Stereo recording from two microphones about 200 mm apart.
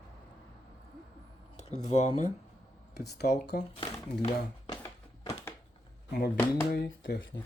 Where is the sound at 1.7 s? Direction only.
35° left (ahead or behind).